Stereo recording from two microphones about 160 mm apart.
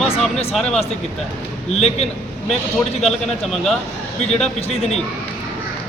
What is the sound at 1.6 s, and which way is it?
Speech, 40° left (ahead or behind).